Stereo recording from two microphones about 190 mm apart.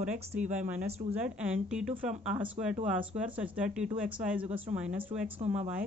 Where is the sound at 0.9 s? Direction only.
35° right (ahead or behind).